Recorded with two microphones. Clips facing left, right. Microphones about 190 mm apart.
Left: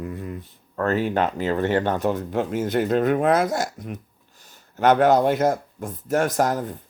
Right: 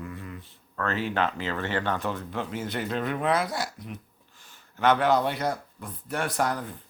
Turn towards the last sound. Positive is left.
turn(degrees=45)  # may be behind; listen again after turning